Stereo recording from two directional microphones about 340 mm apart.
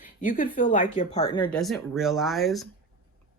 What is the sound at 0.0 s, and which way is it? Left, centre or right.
Speech, left.